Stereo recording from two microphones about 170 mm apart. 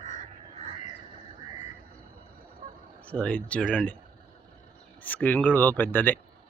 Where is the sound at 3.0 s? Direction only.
5° left (ahead or behind).